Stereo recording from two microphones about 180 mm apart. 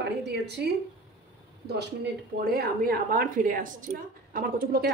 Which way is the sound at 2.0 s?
60° right (ahead or behind).